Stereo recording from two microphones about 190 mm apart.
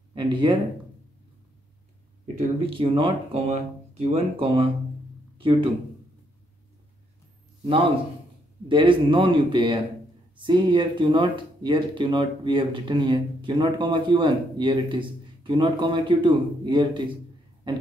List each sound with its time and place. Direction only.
0.1 s speech: 25° right (ahead or behind)
2.3 s speech: 30° right (ahead or behind)
8.6 s speech: 25° right (ahead or behind)